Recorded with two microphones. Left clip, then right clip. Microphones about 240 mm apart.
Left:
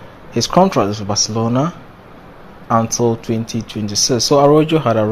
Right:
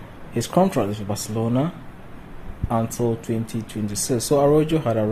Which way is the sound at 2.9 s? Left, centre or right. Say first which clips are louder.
Left 7 dB; centre.